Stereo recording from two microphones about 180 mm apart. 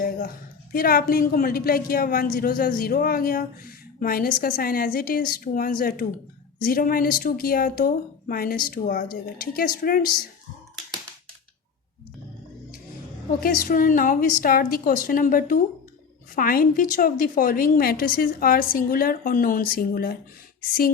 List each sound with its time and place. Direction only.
0.7 s a woman's voice: 55° left (ahead or behind)
13.4 s a woman's voice: 50° left (ahead or behind)